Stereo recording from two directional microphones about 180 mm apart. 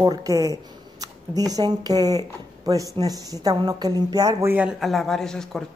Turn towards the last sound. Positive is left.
turn(degrees=5)  # may be behind; listen again after turning